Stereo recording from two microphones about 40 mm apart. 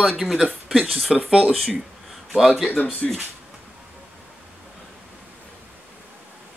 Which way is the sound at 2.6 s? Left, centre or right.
Left.